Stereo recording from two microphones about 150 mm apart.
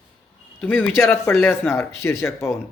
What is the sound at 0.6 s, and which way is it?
A man's voice, 15° left (ahead or behind).